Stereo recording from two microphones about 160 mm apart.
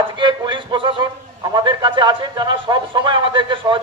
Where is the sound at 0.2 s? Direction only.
30° right (ahead or behind).